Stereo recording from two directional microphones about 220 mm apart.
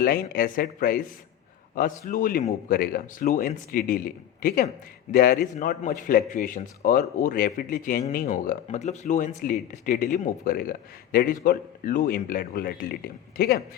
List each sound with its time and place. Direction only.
0.0 s a man's voice: 40° left (ahead or behind)